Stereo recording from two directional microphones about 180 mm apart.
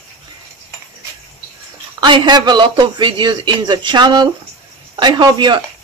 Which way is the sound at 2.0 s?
25° right (ahead or behind).